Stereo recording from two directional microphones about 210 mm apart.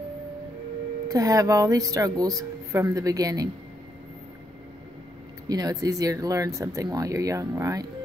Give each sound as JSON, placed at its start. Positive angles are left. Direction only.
{"t": 1.0, "sound": "speech", "side_deg": -15}
{"t": 5.5, "sound": "speech", "side_deg": -15}